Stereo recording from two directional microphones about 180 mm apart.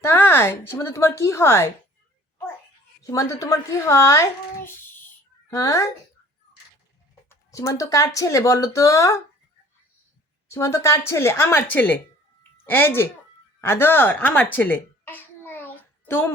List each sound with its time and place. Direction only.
0.0 s speech: 10° left (ahead or behind)
3.0 s a child's voice: 20° left (ahead or behind)
7.3 s a child's voice: 15° left (ahead or behind)
10.5 s a child's voice: 15° left (ahead or behind)
12.4 s a sound: 10° left (ahead or behind)
13.6 s babbling: 15° left (ahead or behind)